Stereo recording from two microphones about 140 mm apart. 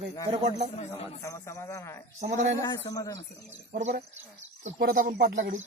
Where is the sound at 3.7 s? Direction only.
90° right; by 5.6 s 65° right (ahead or behind).